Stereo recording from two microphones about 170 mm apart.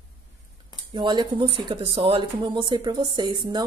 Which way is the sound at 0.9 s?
25° right (ahead or behind).